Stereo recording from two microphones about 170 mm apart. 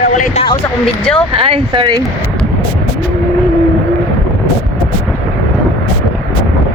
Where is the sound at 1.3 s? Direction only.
30° right (ahead or behind).